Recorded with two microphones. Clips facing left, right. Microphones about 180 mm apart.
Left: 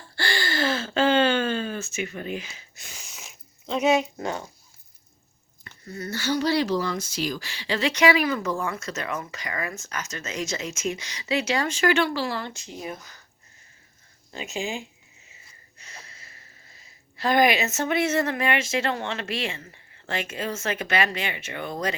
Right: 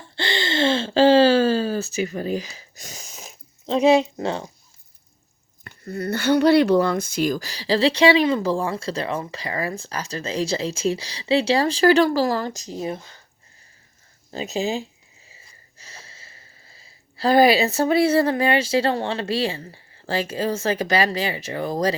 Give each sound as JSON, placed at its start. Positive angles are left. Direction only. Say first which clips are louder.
{"t": 0.2, "sound": "gasp", "louder": "right 4 dB", "side_deg": -20}
{"t": 5.6, "sound": "speech", "louder": "right 7 dB", "side_deg": -60}
{"t": 14.3, "sound": "speech", "louder": "right 6 dB", "side_deg": -35}